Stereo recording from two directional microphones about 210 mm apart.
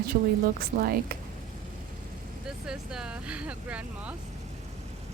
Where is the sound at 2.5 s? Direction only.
5° right (ahead or behind).